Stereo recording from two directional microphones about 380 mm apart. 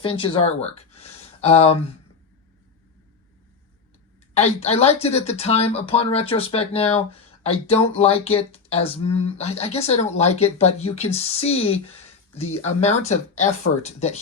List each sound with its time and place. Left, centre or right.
0.0 s speech: centre
4.4 s speech: centre